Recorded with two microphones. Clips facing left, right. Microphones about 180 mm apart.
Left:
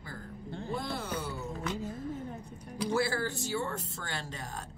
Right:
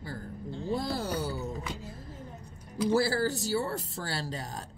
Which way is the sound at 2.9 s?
35° right (ahead or behind).